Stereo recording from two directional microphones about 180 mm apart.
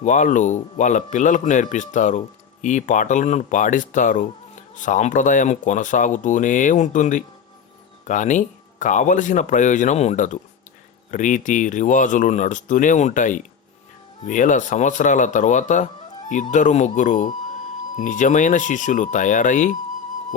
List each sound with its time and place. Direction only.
0.0 s a man's voice: 45° left (ahead or behind)